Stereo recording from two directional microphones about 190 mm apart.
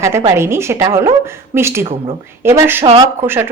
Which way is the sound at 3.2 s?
10° right (ahead or behind).